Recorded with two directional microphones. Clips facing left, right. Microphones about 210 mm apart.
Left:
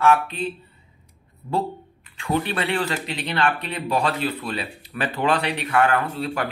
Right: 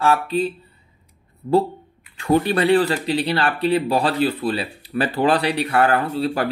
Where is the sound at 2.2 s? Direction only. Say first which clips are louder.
Right 6 dB; 40° right (ahead or behind).